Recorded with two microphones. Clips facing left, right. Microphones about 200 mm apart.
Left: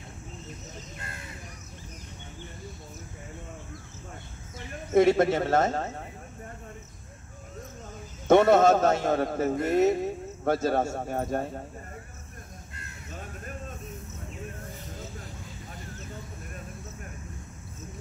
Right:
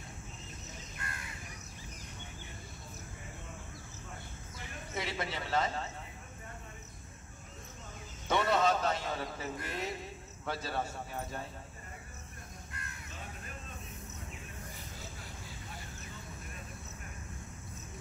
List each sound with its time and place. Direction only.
4.9 s a man's voice: 50° left (ahead or behind)
8.3 s a man's voice: 50° left (ahead or behind)